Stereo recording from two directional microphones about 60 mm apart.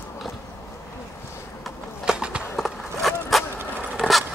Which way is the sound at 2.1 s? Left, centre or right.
Centre.